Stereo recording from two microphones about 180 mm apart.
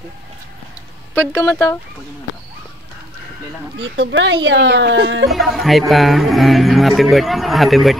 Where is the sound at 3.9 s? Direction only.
80° right.